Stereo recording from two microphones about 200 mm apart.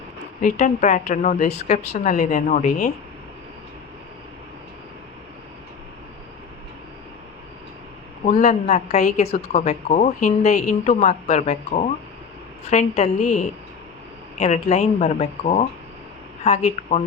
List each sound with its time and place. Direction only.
0.4 s a woman's voice: 40° left (ahead or behind)
8.2 s a woman's voice: 35° left (ahead or behind)